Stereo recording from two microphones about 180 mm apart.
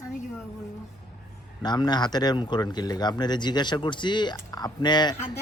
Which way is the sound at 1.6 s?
25° left (ahead or behind).